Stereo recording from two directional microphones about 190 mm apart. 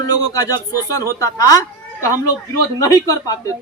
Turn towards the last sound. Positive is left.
turn(degrees=20)  # may be behind; listen again after turning